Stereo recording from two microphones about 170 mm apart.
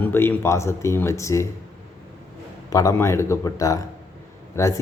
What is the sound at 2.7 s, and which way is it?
A man's voice, 20° left (ahead or behind).